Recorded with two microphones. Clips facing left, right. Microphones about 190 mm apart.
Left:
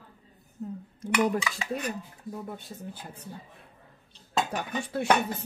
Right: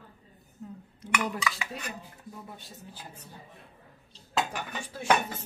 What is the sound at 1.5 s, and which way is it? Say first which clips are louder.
Speech: left 7 dB; 40° left (ahead or behind).